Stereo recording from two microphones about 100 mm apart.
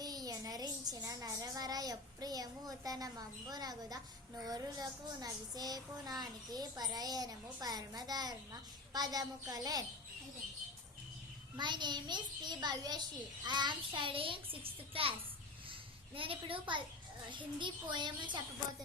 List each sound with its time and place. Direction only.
0.0 s a child's voice: 40° right (ahead or behind)
11.5 s a child's voice: 50° right (ahead or behind); by 15.1 s 65° right (ahead or behind)
16.1 s a child's voice: 65° right (ahead or behind)